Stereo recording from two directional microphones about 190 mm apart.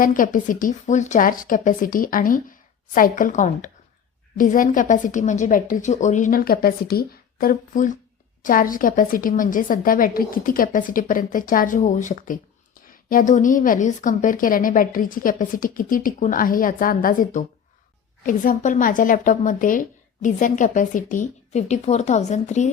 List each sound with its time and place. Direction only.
0.0 s a woman's voice: 45° left (ahead or behind)